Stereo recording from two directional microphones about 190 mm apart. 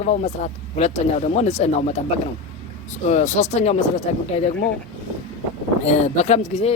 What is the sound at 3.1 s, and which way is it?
Speech, 40° left (ahead or behind).